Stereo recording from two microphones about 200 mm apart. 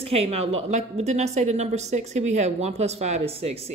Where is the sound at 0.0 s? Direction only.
30° right (ahead or behind).